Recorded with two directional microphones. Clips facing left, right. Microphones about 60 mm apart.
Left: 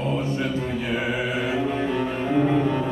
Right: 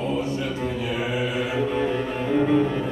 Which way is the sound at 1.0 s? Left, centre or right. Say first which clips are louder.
Even; centre.